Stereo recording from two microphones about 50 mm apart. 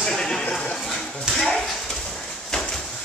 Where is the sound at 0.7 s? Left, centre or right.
Centre.